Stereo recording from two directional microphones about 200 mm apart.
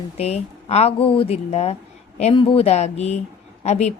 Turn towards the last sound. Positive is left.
turn(degrees=35)  # may be behind; listen again after turning